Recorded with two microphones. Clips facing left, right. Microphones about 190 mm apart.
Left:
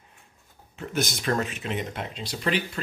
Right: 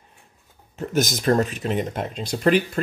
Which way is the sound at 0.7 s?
45° right (ahead or behind).